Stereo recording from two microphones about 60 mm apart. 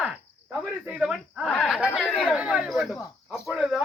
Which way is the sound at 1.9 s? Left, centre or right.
Centre.